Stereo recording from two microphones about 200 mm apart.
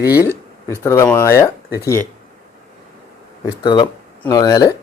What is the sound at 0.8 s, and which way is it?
Speech, 15° left (ahead or behind).